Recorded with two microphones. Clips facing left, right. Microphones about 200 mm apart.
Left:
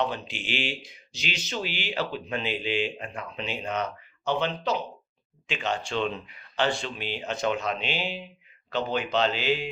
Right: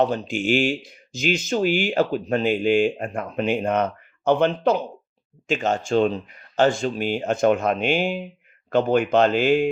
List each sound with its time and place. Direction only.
0.0 s speech: 45° right (ahead or behind)